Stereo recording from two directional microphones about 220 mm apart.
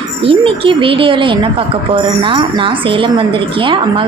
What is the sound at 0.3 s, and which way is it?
A woman's voice, 25° right (ahead or behind).